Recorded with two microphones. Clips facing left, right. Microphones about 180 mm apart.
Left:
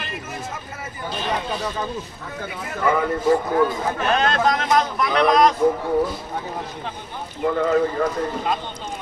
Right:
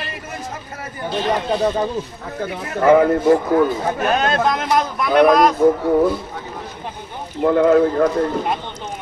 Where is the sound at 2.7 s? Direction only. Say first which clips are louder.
Right 8 dB; 60° right (ahead or behind).